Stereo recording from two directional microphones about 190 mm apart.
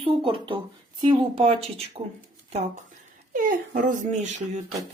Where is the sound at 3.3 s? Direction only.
45° right (ahead or behind).